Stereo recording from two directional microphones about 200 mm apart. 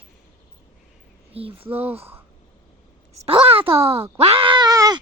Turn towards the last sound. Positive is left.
turn(degrees=-20)  # may be behind; listen again after turning